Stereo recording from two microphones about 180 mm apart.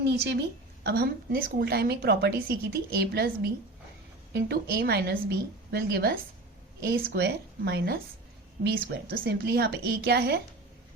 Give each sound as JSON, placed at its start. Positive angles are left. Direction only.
{"t": 0.0, "sound": "a woman's voice", "side_deg": -65}